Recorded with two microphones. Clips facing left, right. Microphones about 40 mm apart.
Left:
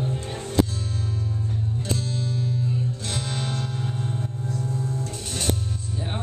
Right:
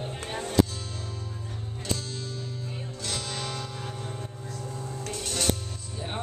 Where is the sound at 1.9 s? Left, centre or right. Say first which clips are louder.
Left 2 dB; centre.